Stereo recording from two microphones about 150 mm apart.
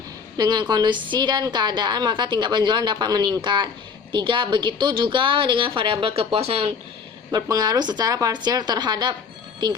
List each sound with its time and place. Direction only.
0.3 s a woman's voice: 30° right (ahead or behind)
7.3 s a woman's voice: 25° right (ahead or behind)